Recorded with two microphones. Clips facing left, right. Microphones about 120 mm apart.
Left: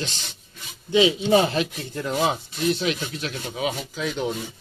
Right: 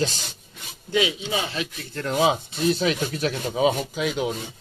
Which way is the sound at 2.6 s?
40° right (ahead or behind).